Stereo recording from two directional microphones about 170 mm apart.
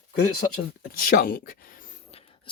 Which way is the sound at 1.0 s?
55° left (ahead or behind).